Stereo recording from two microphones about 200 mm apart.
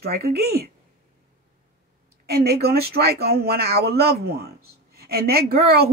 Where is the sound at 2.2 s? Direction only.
50° right (ahead or behind).